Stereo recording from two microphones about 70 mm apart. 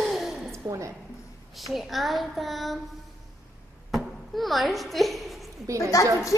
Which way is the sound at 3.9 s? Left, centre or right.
Centre.